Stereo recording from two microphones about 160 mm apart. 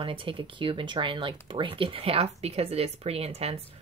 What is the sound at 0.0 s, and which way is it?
Speech, 35° right (ahead or behind).